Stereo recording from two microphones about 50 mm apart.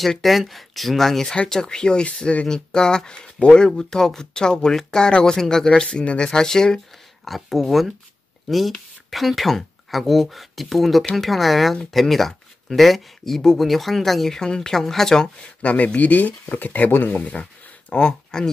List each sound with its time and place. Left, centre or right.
0.2 s speech: centre
5.9 s speech: left
7.2 s speech: centre
15.6 s speech: left